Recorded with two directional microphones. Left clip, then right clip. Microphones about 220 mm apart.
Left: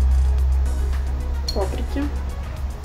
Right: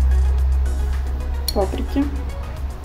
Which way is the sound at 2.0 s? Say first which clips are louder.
Right 5 dB; 25° right (ahead or behind).